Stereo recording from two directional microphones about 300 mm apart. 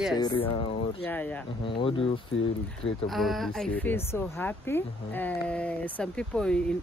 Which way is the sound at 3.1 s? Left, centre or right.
Centre.